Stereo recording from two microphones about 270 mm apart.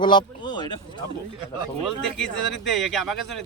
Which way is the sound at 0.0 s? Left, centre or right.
Centre.